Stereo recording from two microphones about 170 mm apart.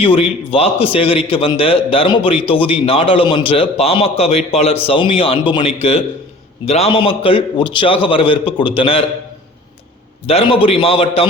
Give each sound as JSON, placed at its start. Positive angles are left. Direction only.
{"t": 0.0, "sound": "a man's voice", "side_deg": 35}
{"t": 10.2, "sound": "a man's voice", "side_deg": 35}